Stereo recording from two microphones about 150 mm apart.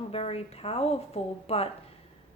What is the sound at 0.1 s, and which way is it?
A woman's voice, 40° left (ahead or behind).